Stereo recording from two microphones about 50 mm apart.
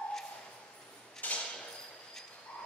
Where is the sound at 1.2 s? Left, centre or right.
Left.